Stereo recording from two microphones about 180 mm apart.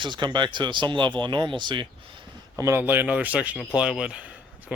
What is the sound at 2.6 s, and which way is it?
Speech, 15° right (ahead or behind).